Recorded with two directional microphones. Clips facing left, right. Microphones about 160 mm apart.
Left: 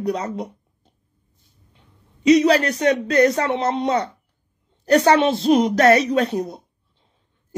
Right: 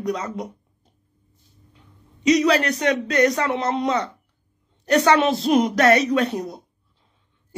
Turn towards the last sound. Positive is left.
turn(degrees=30)  # may be behind; listen again after turning